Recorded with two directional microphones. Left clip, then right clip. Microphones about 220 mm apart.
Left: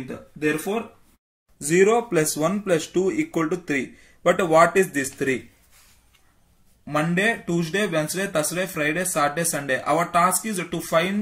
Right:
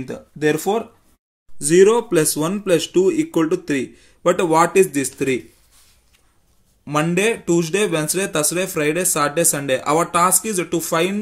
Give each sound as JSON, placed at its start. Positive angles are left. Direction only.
{"t": 1.6, "sound": "speech", "side_deg": -35}
{"t": 6.8, "sound": "speech", "side_deg": -45}